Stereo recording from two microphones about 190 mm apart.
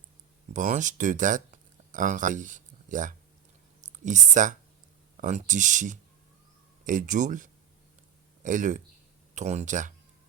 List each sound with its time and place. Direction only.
0.5 s speech: 40° right (ahead or behind)